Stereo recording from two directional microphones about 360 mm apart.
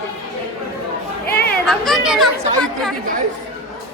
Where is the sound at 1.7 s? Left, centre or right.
Centre.